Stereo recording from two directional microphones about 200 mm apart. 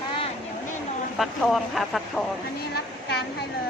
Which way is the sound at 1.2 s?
Centre (ahead or behind).